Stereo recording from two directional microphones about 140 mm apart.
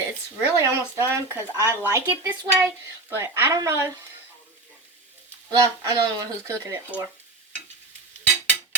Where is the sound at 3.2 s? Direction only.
20° right (ahead or behind).